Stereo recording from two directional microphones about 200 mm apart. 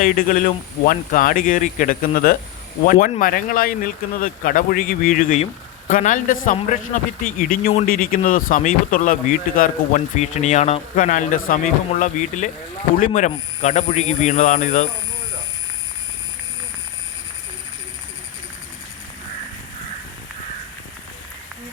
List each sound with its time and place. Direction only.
0.0 s speech: 45° left (ahead or behind)